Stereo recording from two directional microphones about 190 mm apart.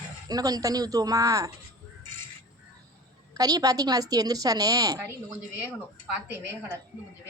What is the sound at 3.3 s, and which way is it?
A woman's voice, 20° right (ahead or behind).